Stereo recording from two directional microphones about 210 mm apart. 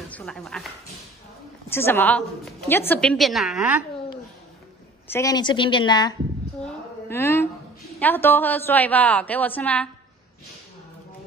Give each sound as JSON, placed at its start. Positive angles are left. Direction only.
{"t": 0.1, "sound": "speech", "side_deg": 5}
{"t": 1.7, "sound": "a woman's voice", "side_deg": 10}
{"t": 5.0, "sound": "a woman's voice", "side_deg": 15}
{"t": 6.6, "sound": "a sound", "side_deg": 10}
{"t": 8.0, "sound": "a woman's voice", "side_deg": 10}